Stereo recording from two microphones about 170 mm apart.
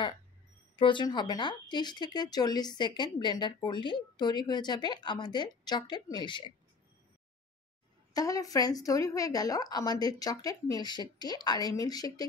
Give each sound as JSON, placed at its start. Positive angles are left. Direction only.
{"t": 0.7, "sound": "speech", "side_deg": 30}
{"t": 8.1, "sound": "speech", "side_deg": 20}